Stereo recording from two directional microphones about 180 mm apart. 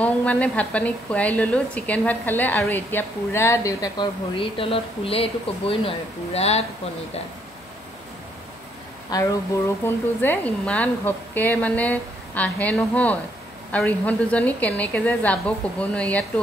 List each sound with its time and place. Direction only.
0.0 s a woman's voice: 5° left (ahead or behind); by 6.6 s 35° left (ahead or behind)
9.1 s speech: 20° left (ahead or behind)
9.8 s a woman's voice: 10° left (ahead or behind)